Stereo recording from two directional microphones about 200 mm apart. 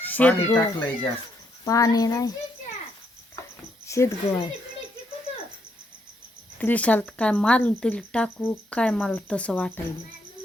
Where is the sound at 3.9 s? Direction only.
15° left (ahead or behind).